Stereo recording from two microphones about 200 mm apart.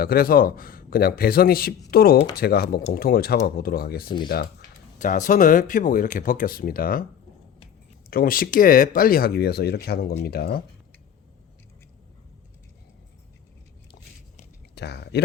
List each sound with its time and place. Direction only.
0.0 s speech: 45° left (ahead or behind)
4.9 s speech: 40° left (ahead or behind)
8.1 s speech: 45° left (ahead or behind)
14.8 s speech: 55° left (ahead or behind)